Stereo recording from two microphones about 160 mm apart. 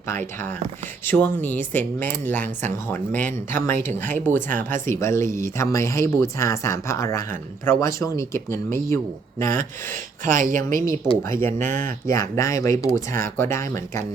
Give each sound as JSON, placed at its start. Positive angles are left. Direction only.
{"t": 0.1, "sound": "speech", "side_deg": 15}
{"t": 9.9, "sound": "speech", "side_deg": -60}
{"t": 11.2, "sound": "speech", "side_deg": 15}
{"t": 11.5, "sound": "speech", "side_deg": -55}
{"t": 11.9, "sound": "speech", "side_deg": 15}